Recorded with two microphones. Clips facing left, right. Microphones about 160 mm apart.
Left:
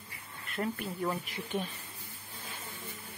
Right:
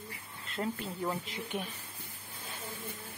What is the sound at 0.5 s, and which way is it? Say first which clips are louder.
Speech: left 1 dB; 25° right (ahead or behind).